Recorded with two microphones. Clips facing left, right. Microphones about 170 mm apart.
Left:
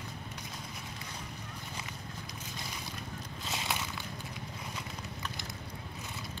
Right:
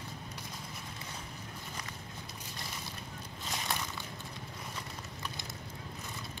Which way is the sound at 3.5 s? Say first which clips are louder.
Left 1 dB; 5° left (ahead or behind).